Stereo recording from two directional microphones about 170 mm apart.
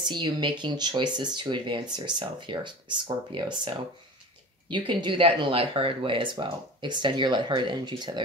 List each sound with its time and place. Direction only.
0.0 s speech: 25° right (ahead or behind)